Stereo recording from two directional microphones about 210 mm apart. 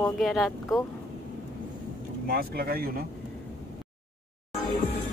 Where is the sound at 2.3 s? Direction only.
45° right (ahead or behind).